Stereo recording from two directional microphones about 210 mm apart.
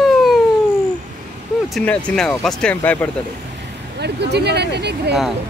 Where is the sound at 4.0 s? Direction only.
50° right (ahead or behind).